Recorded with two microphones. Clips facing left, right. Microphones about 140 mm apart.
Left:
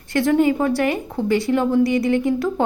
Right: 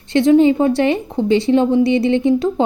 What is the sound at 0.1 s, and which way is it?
A woman's voice, 20° right (ahead or behind).